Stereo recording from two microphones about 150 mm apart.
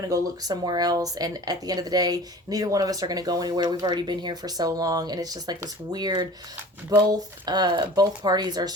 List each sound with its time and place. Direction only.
0.1 s speech: 25° right (ahead or behind)